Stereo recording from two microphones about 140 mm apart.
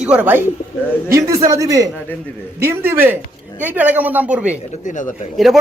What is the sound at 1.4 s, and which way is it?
A woman's voice, 25° right (ahead or behind).